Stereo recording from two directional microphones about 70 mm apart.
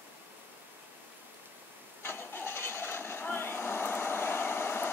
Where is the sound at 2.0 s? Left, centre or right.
Left.